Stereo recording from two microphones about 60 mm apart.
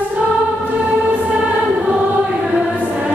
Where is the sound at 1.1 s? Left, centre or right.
Centre.